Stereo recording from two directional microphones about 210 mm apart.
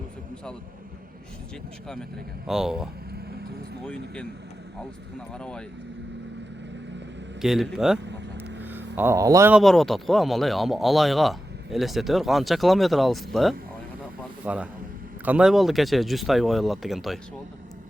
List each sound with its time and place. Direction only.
2.5 s a man's voice: centre (ahead or behind)
3.1 s vehicle: 50° right (ahead or behind)
3.8 s a man's voice: 5° left (ahead or behind)
5.3 s a man's voice: 5° left (ahead or behind)
7.4 s a man's voice: centre (ahead or behind)
7.9 s speech: 55° right (ahead or behind)
9.0 s a man's voice: 15° right (ahead or behind)
14.2 s a sound: 5° right (ahead or behind)
15.2 s a man's voice: 5° right (ahead or behind)